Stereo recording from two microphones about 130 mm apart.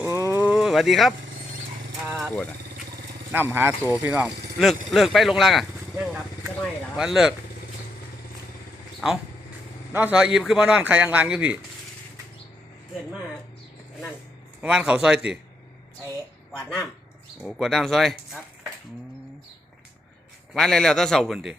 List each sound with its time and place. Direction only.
0.0 s a sound: 25° right (ahead or behind)
0.4 s a sound: 5° right (ahead or behind)
2.1 s vehicle: centre (ahead or behind)
3.3 s a man's voice: 15° right (ahead or behind)
4.9 s a man's voice: centre (ahead or behind)
9.9 s a man's voice: 10° right (ahead or behind)
14.6 s a man's voice: 5° right (ahead or behind)
16.5 s speech: 5° left (ahead or behind)
20.5 s a man's voice: 5° left (ahead or behind)